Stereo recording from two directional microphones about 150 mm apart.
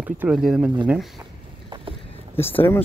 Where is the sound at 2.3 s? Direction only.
15° left (ahead or behind).